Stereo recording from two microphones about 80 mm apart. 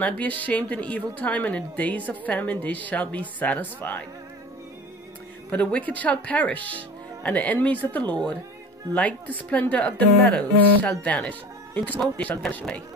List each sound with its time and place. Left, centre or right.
0.0 s speech: centre
5.5 s speech: centre